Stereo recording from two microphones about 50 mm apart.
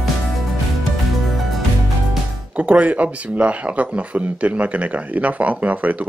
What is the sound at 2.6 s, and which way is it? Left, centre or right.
Speech, right.